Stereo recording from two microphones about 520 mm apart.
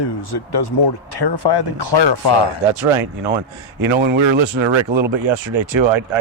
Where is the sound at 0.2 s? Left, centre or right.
Left.